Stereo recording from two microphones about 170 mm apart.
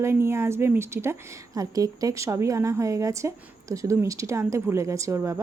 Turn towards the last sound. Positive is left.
turn(degrees=-15)  # may be behind; listen again after turning